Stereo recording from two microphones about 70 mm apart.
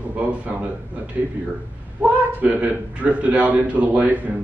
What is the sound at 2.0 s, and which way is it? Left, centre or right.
A man's voice, right.